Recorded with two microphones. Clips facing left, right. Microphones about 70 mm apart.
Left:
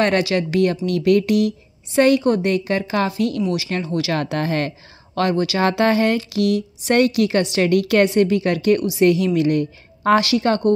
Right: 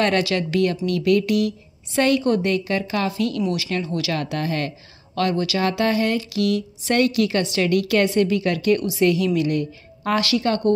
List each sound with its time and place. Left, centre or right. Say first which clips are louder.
0.0 s a woman's voice: left 2 dB; centre
4.1 s speech: left 4 dB; left
5.6 s speech: left 4 dB; left
6.4 s a woman's voice: left 3 dB; left